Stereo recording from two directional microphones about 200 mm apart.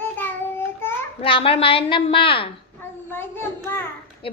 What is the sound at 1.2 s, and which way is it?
A woman's voice, 25° left (ahead or behind).